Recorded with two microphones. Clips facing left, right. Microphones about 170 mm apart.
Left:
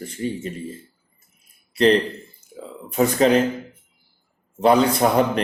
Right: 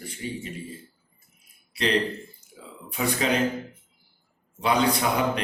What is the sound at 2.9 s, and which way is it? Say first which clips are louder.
Speech: left 9 dB; 45° left (ahead or behind).